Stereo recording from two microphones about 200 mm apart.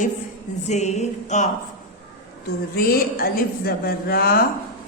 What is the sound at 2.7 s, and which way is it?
A woman's voice, 50° left (ahead or behind).